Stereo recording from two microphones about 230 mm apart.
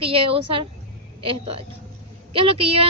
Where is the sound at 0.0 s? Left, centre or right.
Right.